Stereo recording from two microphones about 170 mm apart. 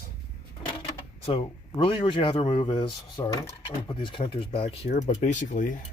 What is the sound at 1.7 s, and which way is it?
Speech, 25° left (ahead or behind).